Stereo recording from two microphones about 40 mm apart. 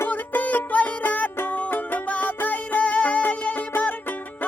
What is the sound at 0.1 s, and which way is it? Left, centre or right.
Music, left.